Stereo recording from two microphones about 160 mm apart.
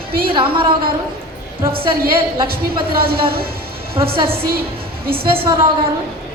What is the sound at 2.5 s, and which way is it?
Speech, 70° right (ahead or behind).